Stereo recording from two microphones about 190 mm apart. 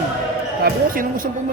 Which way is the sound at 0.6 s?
50° right (ahead or behind).